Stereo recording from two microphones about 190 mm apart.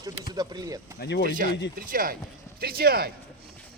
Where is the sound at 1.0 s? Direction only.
65° left (ahead or behind).